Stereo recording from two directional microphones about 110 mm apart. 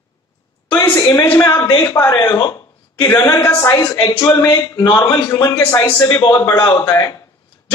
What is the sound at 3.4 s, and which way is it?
Speech, 25° left (ahead or behind).